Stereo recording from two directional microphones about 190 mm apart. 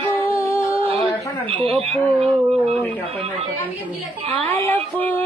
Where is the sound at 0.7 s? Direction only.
30° right (ahead or behind).